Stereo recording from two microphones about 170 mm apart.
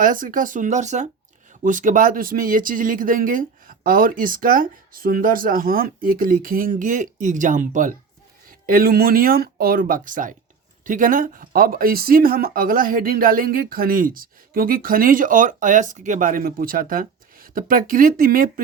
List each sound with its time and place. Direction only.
0.0 s speech: 55° right (ahead or behind)